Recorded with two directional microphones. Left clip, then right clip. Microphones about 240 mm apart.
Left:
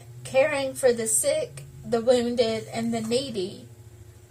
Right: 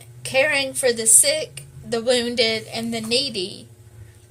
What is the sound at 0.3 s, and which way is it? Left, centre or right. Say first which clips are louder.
A woman's voice: right 3 dB; right.